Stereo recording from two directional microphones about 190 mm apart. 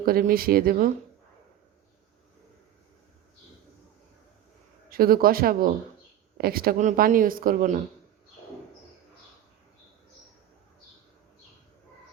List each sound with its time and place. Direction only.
0.0 s speech: 50° right (ahead or behind)
4.9 s speech: 50° right (ahead or behind)